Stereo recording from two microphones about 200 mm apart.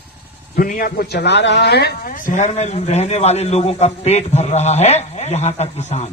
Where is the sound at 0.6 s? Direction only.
45° left (ahead or behind).